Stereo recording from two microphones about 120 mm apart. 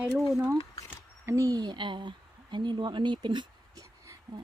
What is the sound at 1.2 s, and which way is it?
Speech, 25° right (ahead or behind).